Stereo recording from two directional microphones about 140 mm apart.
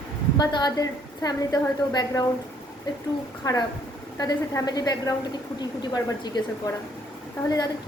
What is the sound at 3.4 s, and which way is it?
A woman's voice, 25° left (ahead or behind).